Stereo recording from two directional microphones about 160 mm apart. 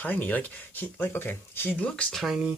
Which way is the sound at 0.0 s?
10° left (ahead or behind).